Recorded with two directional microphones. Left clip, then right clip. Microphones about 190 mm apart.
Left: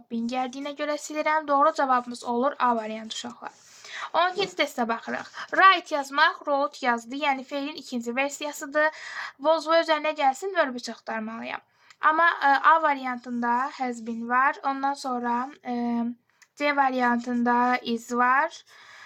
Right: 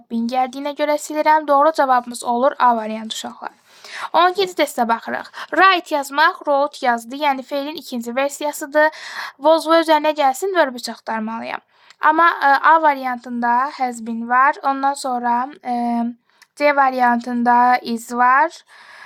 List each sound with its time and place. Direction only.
0.1 s speech: 40° right (ahead or behind)